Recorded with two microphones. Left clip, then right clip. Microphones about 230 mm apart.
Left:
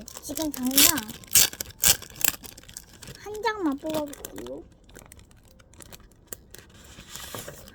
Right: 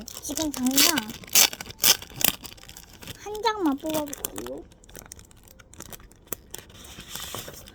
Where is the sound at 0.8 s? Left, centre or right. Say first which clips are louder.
Even; centre.